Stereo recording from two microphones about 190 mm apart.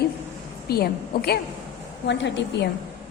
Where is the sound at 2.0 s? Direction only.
65° left (ahead or behind).